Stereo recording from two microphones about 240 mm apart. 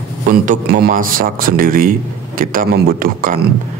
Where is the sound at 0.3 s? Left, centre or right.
Right.